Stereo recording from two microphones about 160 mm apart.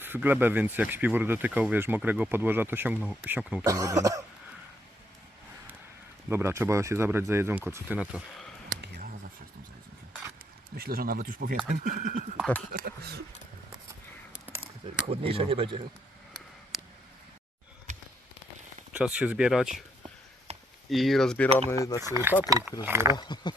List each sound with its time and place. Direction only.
0.0 s speech: 10° right (ahead or behind)
6.2 s speech: 15° right (ahead or behind)
10.8 s speech: 70° right (ahead or behind)
11.7 s speech: 50° right (ahead or behind)
12.7 s speech: 65° right (ahead or behind)
14.4 s a sound: 10° right (ahead or behind)
15.0 s speech: 35° right (ahead or behind)
18.9 s speech: 5° right (ahead or behind)
20.5 s chop: 45° right (ahead or behind)
20.9 s speech: centre (ahead or behind)
21.7 s speech: 20° left (ahead or behind)
22.0 s speech: 15° right (ahead or behind)
23.1 s speech: 25° left (ahead or behind)